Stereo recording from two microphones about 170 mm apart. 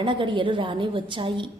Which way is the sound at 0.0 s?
30° right (ahead or behind).